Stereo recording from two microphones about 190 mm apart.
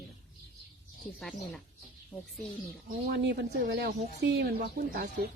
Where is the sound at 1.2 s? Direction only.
Centre (ahead or behind).